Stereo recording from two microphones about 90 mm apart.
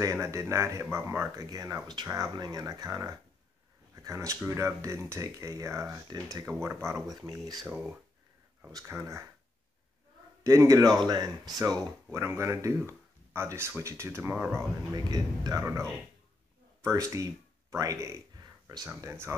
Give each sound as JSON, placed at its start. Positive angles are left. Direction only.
{"t": 0.0, "sound": "speech", "side_deg": -35}
{"t": 1.3, "sound": "speech", "side_deg": -40}
{"t": 6.6, "sound": "speech", "side_deg": -30}
{"t": 7.1, "sound": "speech", "side_deg": -45}
{"t": 7.6, "sound": "speech", "side_deg": -20}
{"t": 8.7, "sound": "speech", "side_deg": -35}
{"t": 10.4, "sound": "speech", "side_deg": -35}
{"t": 12.2, "sound": "speech", "side_deg": -30}
{"t": 15.0, "sound": "speech", "side_deg": -45}
{"t": 15.6, "sound": "speech", "side_deg": -35}